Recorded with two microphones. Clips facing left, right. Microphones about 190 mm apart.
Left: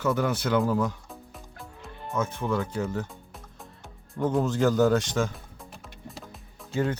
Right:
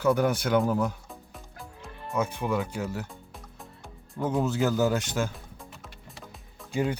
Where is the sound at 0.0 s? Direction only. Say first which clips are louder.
Right 2 dB; 10° right (ahead or behind).